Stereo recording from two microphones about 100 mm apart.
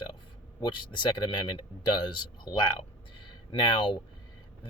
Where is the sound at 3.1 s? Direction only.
50° left (ahead or behind).